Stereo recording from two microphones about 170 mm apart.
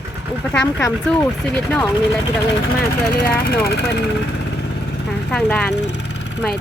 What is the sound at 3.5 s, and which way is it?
Speech, 70° left (ahead or behind).